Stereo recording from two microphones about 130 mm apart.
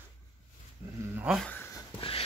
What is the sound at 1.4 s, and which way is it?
Speech, 15° left (ahead or behind).